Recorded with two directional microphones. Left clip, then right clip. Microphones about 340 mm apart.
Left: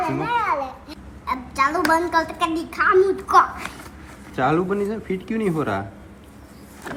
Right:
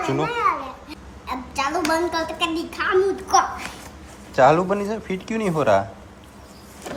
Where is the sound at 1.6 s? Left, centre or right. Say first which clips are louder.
Left 2 dB; right.